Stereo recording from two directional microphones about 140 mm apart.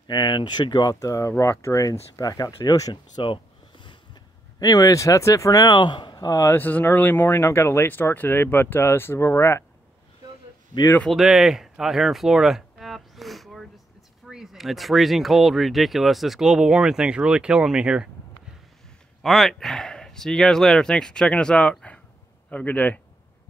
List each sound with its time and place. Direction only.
0.0 s speech: 30° left (ahead or behind)
10.7 s speech: 25° left (ahead or behind)
11.0 s a sound: centre (ahead or behind)
14.2 s speech: centre (ahead or behind)
19.2 s a man's voice: centre (ahead or behind)